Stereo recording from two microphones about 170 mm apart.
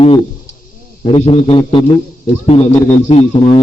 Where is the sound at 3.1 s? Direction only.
35° left (ahead or behind).